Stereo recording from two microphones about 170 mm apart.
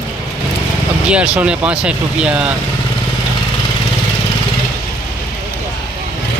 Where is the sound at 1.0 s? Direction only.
5° right (ahead or behind).